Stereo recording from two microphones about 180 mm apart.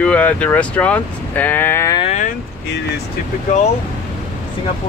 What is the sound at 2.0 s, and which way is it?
Speech, 40° left (ahead or behind).